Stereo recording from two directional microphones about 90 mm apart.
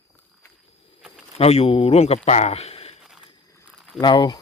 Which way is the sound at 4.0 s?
55° left (ahead or behind).